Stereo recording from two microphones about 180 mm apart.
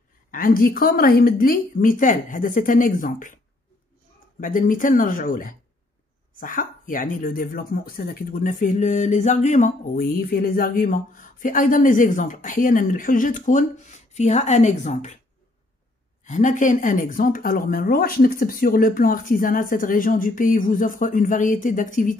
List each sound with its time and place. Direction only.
0.3 s speech: 50° left (ahead or behind)
4.4 s speech: 50° left (ahead or behind)
16.3 s speech: 45° left (ahead or behind)